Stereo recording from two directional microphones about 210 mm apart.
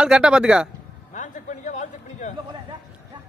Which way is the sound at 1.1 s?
35° left (ahead or behind).